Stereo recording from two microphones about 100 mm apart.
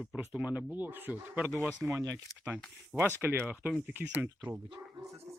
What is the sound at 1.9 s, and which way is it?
Speech, 30° right (ahead or behind).